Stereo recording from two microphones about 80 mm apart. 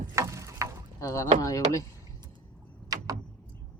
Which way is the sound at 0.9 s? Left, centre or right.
Left.